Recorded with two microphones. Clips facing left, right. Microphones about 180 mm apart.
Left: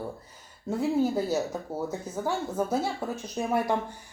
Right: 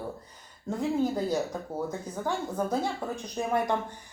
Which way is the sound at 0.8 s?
5° left (ahead or behind).